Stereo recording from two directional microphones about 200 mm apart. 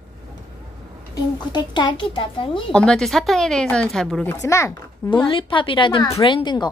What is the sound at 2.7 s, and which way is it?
A woman's voice, 5° left (ahead or behind).